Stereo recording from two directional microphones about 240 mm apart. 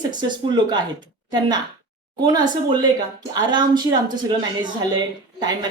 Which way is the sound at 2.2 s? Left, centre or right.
Centre.